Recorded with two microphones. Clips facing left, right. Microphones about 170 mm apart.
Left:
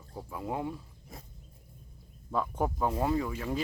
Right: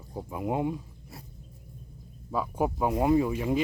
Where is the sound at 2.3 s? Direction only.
5° right (ahead or behind).